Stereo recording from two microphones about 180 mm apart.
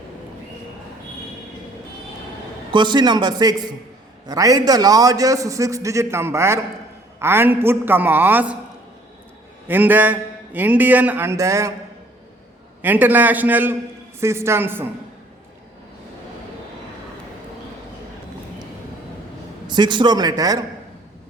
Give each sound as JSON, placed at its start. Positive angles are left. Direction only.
{"t": 2.7, "sound": "a man's voice", "side_deg": -25}
{"t": 9.6, "sound": "a man's voice", "side_deg": -10}
{"t": 12.8, "sound": "a man's voice", "side_deg": -10}
{"t": 19.6, "sound": "a man's voice", "side_deg": -25}